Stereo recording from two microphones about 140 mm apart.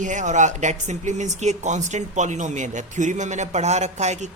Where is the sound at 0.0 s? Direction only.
60° right (ahead or behind).